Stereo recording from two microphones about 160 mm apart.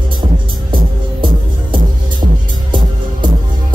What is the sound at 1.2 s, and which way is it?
Music, 30° right (ahead or behind).